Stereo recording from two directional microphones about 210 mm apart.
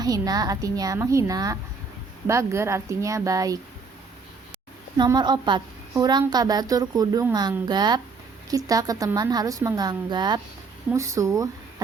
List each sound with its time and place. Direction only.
0.0 s a woman's voice: 20° right (ahead or behind)
4.9 s a woman's voice: 20° right (ahead or behind)